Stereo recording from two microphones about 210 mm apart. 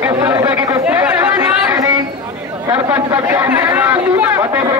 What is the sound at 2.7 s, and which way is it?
Speech, 10° right (ahead or behind).